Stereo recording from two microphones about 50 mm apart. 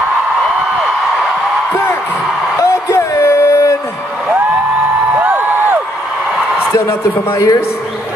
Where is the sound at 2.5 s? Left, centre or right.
Left.